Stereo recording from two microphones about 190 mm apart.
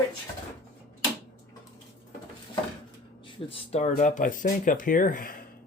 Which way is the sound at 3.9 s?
45° left (ahead or behind).